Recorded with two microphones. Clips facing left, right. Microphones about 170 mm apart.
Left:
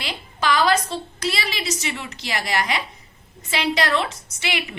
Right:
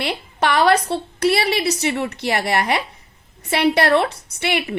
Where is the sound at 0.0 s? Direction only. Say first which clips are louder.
Right 5 dB; 65° right (ahead or behind).